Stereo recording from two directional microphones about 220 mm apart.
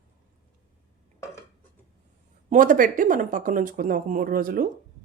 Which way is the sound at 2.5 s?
35° right (ahead or behind).